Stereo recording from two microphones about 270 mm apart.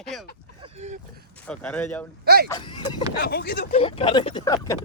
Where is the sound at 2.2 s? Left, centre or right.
Right.